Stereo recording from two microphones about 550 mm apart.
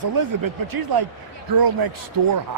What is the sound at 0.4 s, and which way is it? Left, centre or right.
Speech, right.